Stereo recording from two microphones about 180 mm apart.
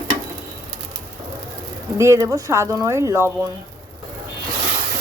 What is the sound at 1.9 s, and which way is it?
Speech, 15° right (ahead or behind).